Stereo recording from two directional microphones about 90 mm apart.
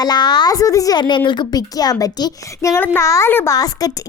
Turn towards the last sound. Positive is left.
turn(degrees=45)  # may be behind; listen again after turning